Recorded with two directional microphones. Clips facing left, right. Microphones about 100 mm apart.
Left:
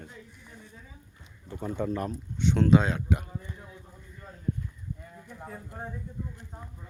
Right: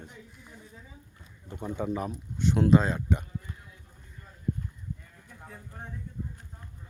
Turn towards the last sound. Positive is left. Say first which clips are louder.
# left 5 dB
turn(degrees=15)  # may be behind; listen again after turning